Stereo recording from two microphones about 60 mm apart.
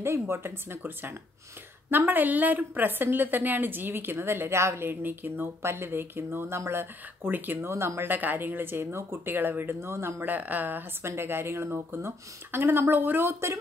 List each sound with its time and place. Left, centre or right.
0.0 s a woman's voice: right
7.6 s speech: right
8.1 s a woman's voice: right
10.3 s a woman's voice: right
11.1 s a woman's voice: right